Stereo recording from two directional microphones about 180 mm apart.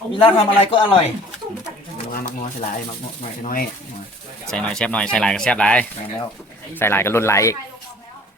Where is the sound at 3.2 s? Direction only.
50° left (ahead or behind).